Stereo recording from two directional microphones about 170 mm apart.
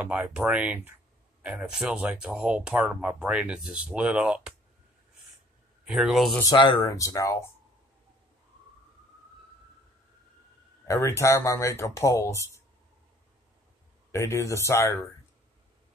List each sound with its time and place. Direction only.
0.0 s speech: 10° right (ahead or behind)
5.9 s speech: centre (ahead or behind)
6.5 s speech: 25° left (ahead or behind)
10.9 s speech: 15° left (ahead or behind)
14.1 s speech: 15° left (ahead or behind)